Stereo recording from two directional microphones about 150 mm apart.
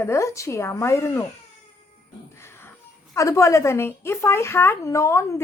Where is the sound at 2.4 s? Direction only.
15° left (ahead or behind).